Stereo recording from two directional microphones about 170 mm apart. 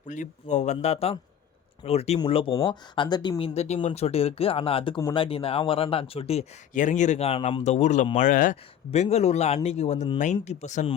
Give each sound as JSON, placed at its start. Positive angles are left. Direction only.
{"t": 0.1, "sound": "speech", "side_deg": 45}
{"t": 4.9, "sound": "speech", "side_deg": 20}
{"t": 5.2, "sound": "speech", "side_deg": 35}